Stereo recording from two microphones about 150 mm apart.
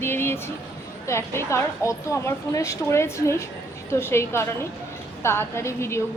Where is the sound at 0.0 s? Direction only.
15° left (ahead or behind).